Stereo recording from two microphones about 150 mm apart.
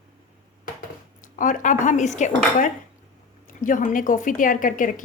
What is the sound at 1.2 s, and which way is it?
A woman's voice, 60° left (ahead or behind).